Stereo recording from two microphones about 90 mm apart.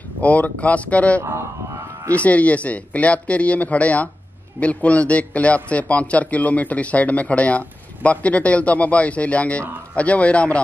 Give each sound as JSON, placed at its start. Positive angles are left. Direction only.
{"t": 0.2, "sound": "a man's voice", "side_deg": 15}